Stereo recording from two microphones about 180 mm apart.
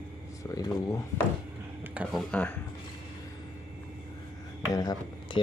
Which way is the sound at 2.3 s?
5° left (ahead or behind).